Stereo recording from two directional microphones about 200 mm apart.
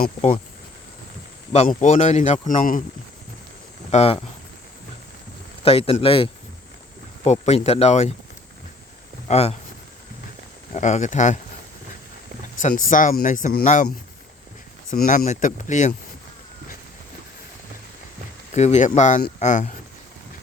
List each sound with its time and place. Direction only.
1.5 s a man's voice: 35° left (ahead or behind)
3.9 s a man's voice: 30° left (ahead or behind)
5.6 s a man's voice: 30° left (ahead or behind)
9.2 s a man's voice: 30° left (ahead or behind)
10.8 s a man's voice: 35° left (ahead or behind)
12.5 s a man's voice: 40° left (ahead or behind)
14.8 s a man's voice: 40° left (ahead or behind)
18.5 s a man's voice: 35° left (ahead or behind)